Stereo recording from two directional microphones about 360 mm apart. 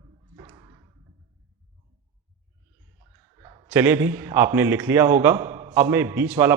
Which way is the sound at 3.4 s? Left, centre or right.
Centre.